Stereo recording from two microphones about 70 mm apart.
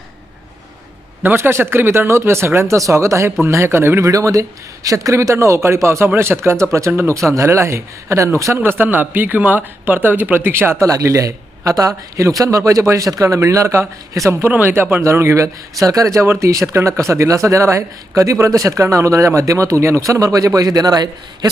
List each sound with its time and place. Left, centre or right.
1.2 s speech: right
4.1 s speech: right
8.5 s speech: right
10.8 s speech: right
13.0 s speech: right
16.1 s speech: right